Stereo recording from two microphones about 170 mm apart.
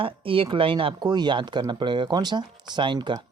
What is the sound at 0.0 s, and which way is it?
Speech, 30° right (ahead or behind).